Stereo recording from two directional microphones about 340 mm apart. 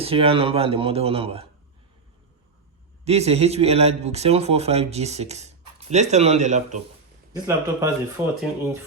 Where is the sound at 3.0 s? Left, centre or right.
Centre.